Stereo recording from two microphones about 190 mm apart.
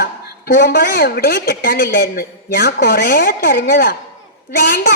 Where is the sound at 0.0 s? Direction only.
55° left (ahead or behind).